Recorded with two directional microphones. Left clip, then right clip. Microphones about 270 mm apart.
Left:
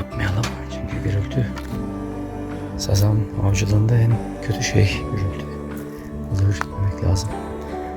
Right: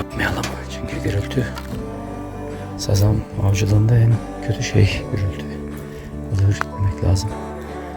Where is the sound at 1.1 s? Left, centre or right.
Right.